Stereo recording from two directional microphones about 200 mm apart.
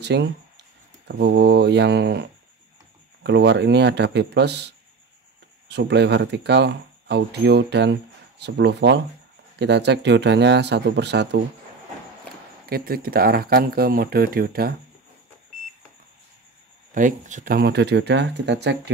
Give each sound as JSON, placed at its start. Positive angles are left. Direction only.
{"t": 0.0, "sound": "speech", "side_deg": -60}
{"t": 3.3, "sound": "speech", "side_deg": -60}
{"t": 12.6, "sound": "speech", "side_deg": -50}
{"t": 16.9, "sound": "speech", "side_deg": -40}